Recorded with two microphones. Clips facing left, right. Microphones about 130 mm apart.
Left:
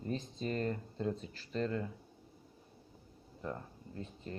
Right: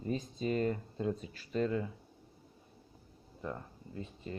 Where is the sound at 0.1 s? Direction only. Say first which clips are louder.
Right 4 dB; 15° right (ahead or behind).